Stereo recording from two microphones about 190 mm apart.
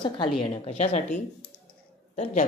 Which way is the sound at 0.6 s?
35° left (ahead or behind).